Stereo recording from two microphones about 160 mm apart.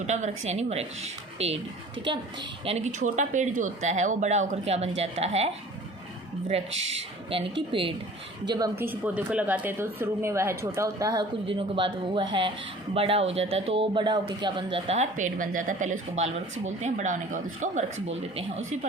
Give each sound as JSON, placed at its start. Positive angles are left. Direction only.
{"t": 0.1, "sound": "a man's voice", "side_deg": -45}
{"t": 2.6, "sound": "speech", "side_deg": -45}
{"t": 6.5, "sound": "a man's voice", "side_deg": -40}
{"t": 8.7, "sound": "speech", "side_deg": -10}
{"t": 11.4, "sound": "a man's voice", "side_deg": -30}